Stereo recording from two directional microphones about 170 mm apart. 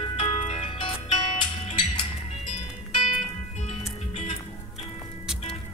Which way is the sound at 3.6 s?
40° left (ahead or behind).